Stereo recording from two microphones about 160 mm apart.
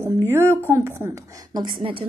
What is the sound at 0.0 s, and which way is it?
A woman's voice, 15° right (ahead or behind).